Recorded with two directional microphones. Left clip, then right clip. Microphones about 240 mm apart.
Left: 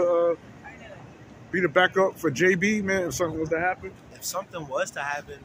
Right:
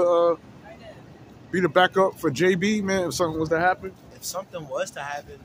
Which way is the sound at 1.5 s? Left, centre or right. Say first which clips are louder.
Right 2 dB; centre.